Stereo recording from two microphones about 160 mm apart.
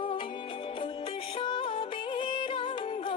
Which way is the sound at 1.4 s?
30° left (ahead or behind).